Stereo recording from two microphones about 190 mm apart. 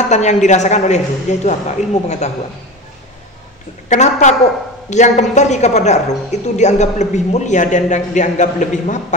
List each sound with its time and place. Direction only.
0.1 s a woman's voice: 40° left (ahead or behind)
3.9 s a woman's voice: 40° left (ahead or behind)